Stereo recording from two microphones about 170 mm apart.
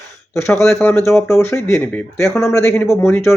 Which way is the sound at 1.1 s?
Centre (ahead or behind).